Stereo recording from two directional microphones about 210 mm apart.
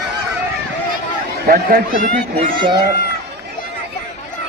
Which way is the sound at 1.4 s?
40° right (ahead or behind).